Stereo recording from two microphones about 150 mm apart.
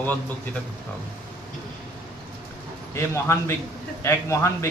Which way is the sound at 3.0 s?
15° left (ahead or behind).